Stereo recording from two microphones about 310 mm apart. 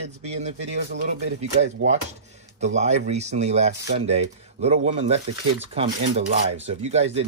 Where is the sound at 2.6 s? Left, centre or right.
Right.